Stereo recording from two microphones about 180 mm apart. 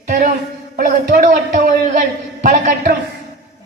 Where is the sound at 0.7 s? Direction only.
50° right (ahead or behind).